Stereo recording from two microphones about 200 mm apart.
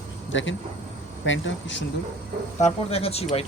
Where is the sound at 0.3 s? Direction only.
70° left (ahead or behind).